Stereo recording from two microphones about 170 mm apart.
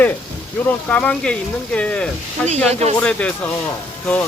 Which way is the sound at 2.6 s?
40° right (ahead or behind).